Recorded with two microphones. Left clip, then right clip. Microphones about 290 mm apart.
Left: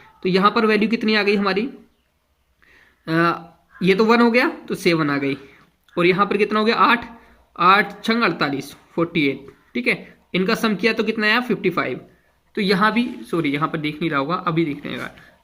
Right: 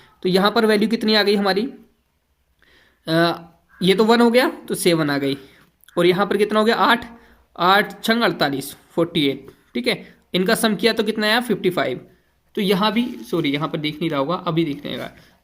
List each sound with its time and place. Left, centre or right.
0.2 s speech: centre
3.0 s speech: centre